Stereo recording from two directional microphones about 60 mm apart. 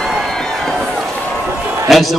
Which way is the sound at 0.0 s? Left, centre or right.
Centre.